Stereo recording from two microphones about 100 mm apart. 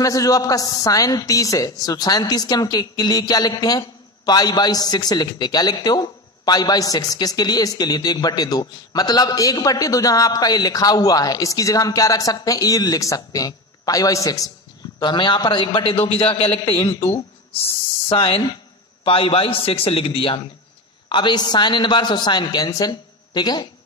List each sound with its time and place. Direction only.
0.0 s a man's voice: 35° left (ahead or behind)
15.0 s a man's voice: 50° left (ahead or behind); by 16.8 s 75° left (ahead or behind)
18.0 s a man's voice: 65° left (ahead or behind)
21.1 s a man's voice: 50° left (ahead or behind)